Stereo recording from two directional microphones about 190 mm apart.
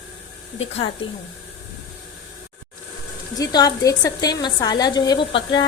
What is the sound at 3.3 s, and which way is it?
A woman's voice, 20° left (ahead or behind).